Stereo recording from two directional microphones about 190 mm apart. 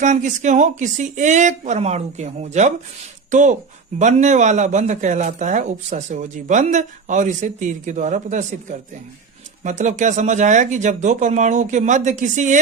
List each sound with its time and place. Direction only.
0.0 s speech: 40° right (ahead or behind)
9.6 s speech: 40° right (ahead or behind)